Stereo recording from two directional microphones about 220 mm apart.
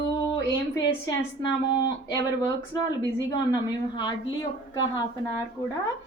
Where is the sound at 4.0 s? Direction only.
20° left (ahead or behind).